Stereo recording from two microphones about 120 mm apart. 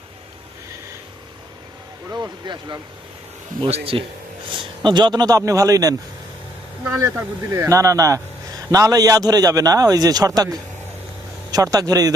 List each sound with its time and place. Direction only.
2.0 s speech: 35° right (ahead or behind)
3.7 s a man's voice: 50° right (ahead or behind); by 5.9 s 30° right (ahead or behind)
7.0 s speech: 25° right (ahead or behind)